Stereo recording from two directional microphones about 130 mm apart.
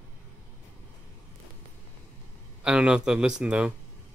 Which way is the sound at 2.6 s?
5° right (ahead or behind).